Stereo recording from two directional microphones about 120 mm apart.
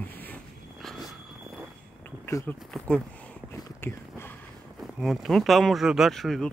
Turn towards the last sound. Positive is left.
turn(degrees=0)  # may be behind; listen again after turning